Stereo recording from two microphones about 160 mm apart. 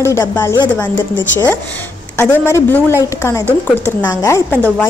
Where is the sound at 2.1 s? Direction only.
15° left (ahead or behind).